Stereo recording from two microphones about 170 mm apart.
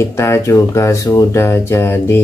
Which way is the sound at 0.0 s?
15° left (ahead or behind).